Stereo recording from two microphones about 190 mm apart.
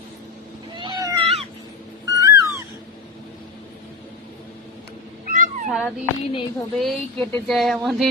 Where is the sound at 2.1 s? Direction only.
20° right (ahead or behind).